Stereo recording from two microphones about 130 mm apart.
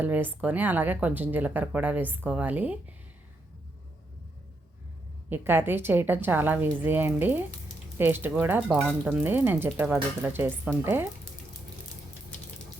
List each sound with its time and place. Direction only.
0.0 s a woman's voice: 15° right (ahead or behind)
5.3 s a woman's voice: 15° right (ahead or behind)